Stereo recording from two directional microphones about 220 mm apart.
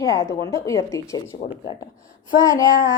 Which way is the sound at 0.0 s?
15° left (ahead or behind).